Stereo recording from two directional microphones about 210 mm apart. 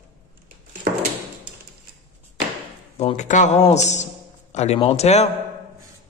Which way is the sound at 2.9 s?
30° left (ahead or behind).